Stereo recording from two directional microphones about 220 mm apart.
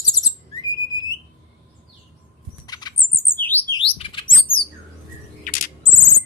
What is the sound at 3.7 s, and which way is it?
Bird, 25° left (ahead or behind).